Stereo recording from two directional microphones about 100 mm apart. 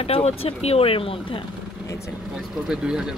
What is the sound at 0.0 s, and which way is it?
Speech, 75° left (ahead or behind).